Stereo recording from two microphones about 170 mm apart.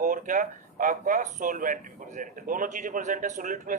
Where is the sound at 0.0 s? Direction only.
50° right (ahead or behind).